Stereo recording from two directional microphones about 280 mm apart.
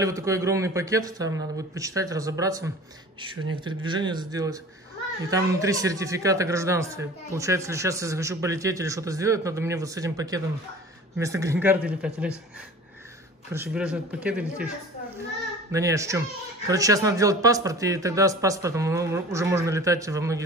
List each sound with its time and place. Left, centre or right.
0.0 s speech: centre
13.5 s speech: centre
15.7 s speech: centre